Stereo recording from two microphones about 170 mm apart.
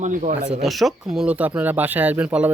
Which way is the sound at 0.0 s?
50° right (ahead or behind).